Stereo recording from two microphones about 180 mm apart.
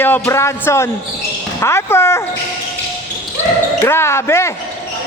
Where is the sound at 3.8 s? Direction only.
15° left (ahead or behind).